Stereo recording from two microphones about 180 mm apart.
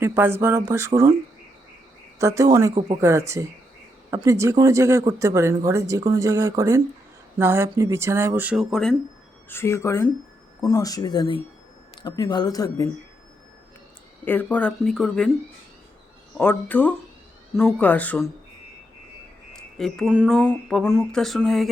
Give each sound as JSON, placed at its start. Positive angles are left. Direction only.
{"t": 0.0, "sound": "speech", "side_deg": -10}
{"t": 2.1, "sound": "speech", "side_deg": -15}
{"t": 9.5, "sound": "speech", "side_deg": 15}
{"t": 14.3, "sound": "speech", "side_deg": 10}
{"t": 16.4, "sound": "speech", "side_deg": 10}
{"t": 19.5, "sound": "wind chime", "side_deg": 0}
{"t": 20.4, "sound": "speech", "side_deg": 5}